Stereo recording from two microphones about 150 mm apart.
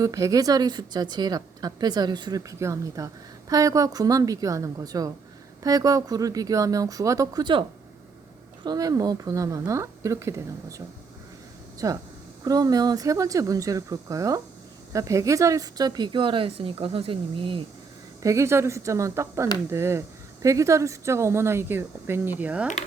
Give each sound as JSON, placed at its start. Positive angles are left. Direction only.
{"t": 0.0, "sound": "a woman's voice", "side_deg": -20}
{"t": 8.6, "sound": "a woman's voice", "side_deg": -25}
{"t": 18.2, "sound": "a woman's voice", "side_deg": -20}